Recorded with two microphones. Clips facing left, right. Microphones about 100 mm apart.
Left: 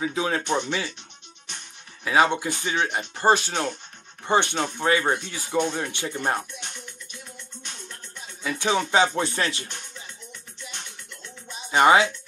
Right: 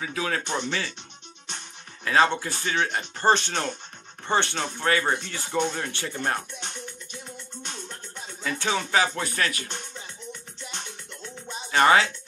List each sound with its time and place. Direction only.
0.0 s speech: 20° left (ahead or behind)
2.0 s speech: 15° left (ahead or behind)
8.5 s speech: 15° left (ahead or behind)
11.7 s speech: 15° left (ahead or behind)